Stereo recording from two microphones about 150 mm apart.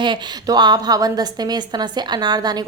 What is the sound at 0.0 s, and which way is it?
A woman's voice, 30° right (ahead or behind).